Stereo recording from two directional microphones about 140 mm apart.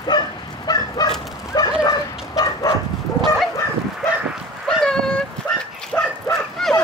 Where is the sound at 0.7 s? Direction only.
30° left (ahead or behind).